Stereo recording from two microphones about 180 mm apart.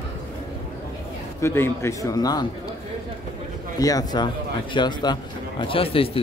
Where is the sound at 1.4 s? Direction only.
15° left (ahead or behind).